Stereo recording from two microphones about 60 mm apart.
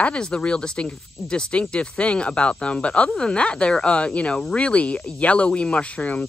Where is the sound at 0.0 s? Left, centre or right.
Centre.